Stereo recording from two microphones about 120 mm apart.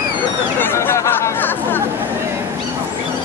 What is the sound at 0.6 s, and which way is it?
Chatter, 20° left (ahead or behind).